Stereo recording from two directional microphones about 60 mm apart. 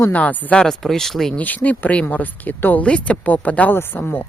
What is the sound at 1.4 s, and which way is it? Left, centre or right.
Speech, left.